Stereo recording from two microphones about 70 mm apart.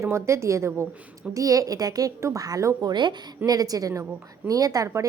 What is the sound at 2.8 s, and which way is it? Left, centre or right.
A woman's voice, right.